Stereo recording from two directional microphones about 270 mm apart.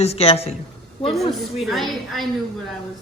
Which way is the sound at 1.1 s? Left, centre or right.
Centre.